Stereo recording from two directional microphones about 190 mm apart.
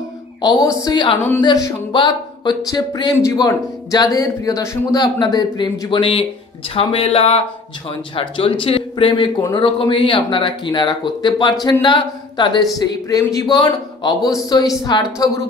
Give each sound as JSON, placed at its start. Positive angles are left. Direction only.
{"t": 0.4, "sound": "speech", "side_deg": 20}